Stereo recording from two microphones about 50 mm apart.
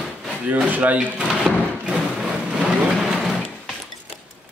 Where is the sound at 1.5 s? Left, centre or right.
Centre.